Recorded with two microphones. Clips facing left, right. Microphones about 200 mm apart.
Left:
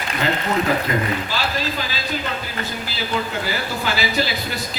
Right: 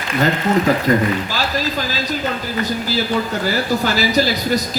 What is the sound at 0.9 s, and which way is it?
Speech, 40° right (ahead or behind).